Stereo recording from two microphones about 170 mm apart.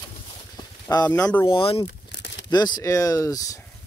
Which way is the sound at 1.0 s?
10° left (ahead or behind).